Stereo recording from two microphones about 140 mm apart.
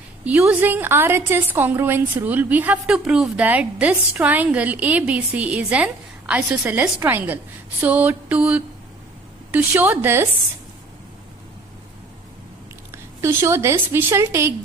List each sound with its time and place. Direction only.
0.2 s a woman's voice: 10° right (ahead or behind)
13.2 s a woman's voice: 20° right (ahead or behind)